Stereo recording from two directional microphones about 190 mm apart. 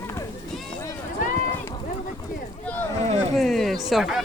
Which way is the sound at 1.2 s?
45° left (ahead or behind).